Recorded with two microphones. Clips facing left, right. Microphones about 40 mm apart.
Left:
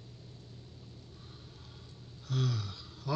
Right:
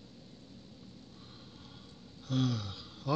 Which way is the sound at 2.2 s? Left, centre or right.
Right.